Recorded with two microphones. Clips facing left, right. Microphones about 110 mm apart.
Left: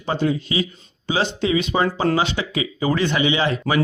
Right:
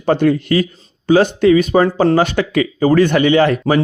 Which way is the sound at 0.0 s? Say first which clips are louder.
Right 8 dB; 55° right (ahead or behind).